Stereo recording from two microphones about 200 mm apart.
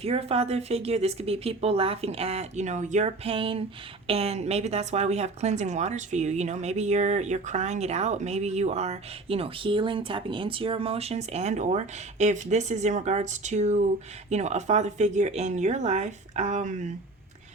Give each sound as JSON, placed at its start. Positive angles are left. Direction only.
{"t": 0.0, "sound": "a woman's voice", "side_deg": -30}